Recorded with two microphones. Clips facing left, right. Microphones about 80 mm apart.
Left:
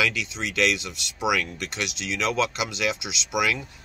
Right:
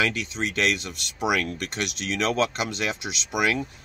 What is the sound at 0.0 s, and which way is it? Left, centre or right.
Speech, right.